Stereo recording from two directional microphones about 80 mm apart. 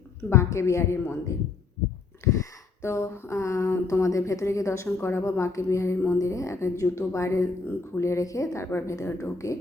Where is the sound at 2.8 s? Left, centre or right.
Left.